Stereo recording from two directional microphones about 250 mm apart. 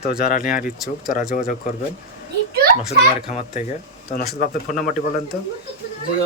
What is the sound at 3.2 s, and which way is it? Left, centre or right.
Speech, left.